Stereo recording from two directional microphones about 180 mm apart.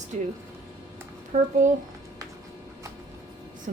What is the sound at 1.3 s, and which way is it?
Speech, 45° right (ahead or behind).